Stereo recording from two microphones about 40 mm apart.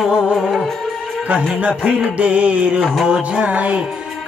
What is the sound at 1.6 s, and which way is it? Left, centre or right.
Music, right.